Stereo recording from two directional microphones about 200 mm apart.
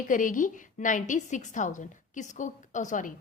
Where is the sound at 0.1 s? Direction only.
40° left (ahead or behind).